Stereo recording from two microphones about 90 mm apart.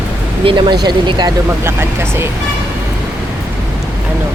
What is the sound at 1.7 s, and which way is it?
Speech, 30° right (ahead or behind).